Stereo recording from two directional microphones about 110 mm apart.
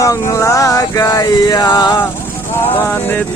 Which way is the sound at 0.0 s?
30° left (ahead or behind).